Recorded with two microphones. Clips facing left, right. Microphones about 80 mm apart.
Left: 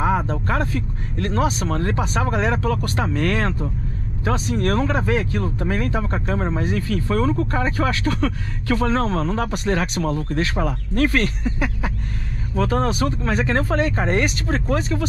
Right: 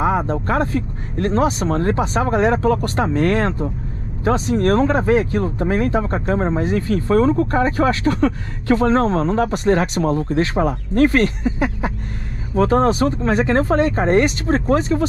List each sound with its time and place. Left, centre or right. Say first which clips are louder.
0.0 s speech: right 2 dB; right
12.5 s speech: right 6 dB; right